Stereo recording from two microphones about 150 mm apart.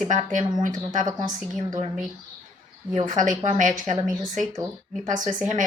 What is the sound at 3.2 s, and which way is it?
Speech, 60° right (ahead or behind).